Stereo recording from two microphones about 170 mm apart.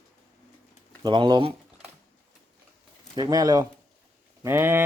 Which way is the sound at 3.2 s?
20° right (ahead or behind).